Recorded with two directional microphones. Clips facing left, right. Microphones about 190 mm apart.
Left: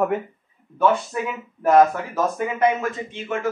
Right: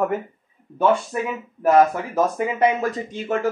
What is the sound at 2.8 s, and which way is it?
Speech, 40° right (ahead or behind).